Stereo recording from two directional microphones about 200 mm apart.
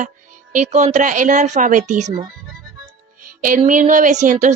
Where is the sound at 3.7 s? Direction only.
40° right (ahead or behind).